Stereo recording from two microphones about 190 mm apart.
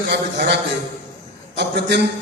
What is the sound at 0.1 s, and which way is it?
A man's voice, 65° right (ahead or behind).